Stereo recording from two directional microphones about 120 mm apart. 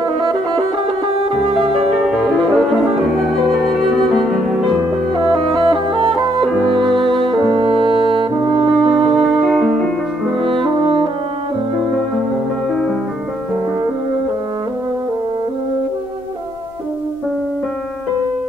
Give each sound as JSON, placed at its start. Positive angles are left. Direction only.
{"t": 1.5, "sound": "music", "side_deg": 0}
{"t": 5.2, "sound": "music", "side_deg": -40}
{"t": 9.1, "sound": "music", "side_deg": 0}
{"t": 10.4, "sound": "music", "side_deg": -50}